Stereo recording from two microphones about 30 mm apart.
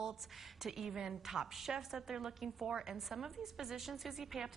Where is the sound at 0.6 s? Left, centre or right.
Centre.